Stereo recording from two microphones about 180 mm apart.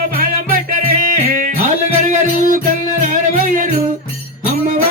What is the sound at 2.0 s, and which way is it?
Music, 45° right (ahead or behind).